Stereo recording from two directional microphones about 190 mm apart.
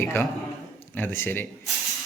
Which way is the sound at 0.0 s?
10° left (ahead or behind).